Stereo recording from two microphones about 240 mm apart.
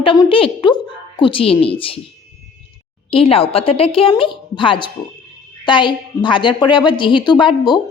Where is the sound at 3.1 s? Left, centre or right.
Left.